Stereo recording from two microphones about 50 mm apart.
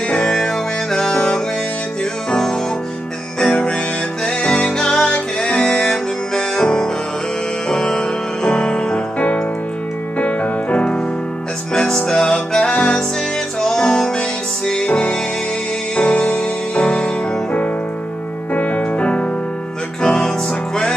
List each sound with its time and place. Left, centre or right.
0.1 s music: centre
3.3 s music: centre